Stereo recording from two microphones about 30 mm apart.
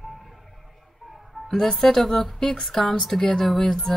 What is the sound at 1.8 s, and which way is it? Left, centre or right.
Speech, centre.